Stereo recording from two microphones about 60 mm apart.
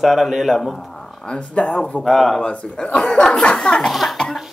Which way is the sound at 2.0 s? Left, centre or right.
Centre.